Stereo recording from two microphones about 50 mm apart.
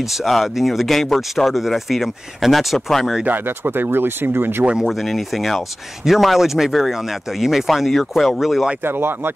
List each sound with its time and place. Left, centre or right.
0.0 s speech: centre
3.3 s speech: right
4.8 s speech: centre
8.8 s speech: right